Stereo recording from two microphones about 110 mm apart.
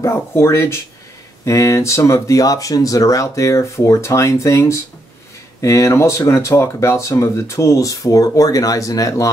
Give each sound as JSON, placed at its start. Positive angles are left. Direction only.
{"t": 0.0, "sound": "speech", "side_deg": 25}